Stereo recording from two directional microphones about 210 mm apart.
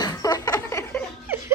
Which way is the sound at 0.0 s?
15° left (ahead or behind).